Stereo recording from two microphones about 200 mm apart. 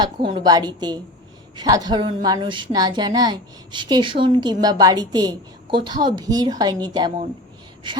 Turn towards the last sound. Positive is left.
turn(degrees=-20)  # may be behind; listen again after turning